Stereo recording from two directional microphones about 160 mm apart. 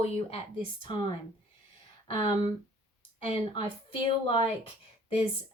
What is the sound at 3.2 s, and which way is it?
Speech, 35° left (ahead or behind).